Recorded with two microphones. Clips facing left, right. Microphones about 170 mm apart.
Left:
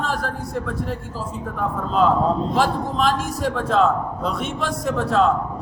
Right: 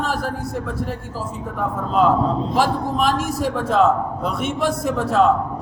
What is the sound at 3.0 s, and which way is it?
A man's voice, 10° right (ahead or behind).